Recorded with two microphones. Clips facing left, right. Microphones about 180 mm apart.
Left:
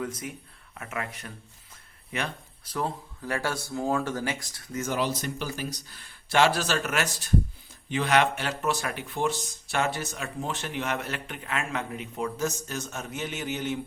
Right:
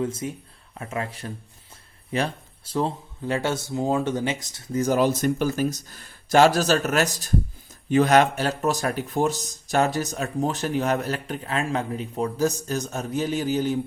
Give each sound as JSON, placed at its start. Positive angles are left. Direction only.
{"t": 0.0, "sound": "speech", "side_deg": -25}